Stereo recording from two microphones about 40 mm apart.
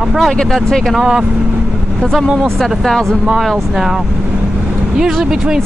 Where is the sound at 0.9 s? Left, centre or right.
Centre.